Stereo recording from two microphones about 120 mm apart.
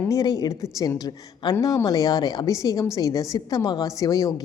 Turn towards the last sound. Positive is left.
turn(degrees=30)  # may be behind; listen again after turning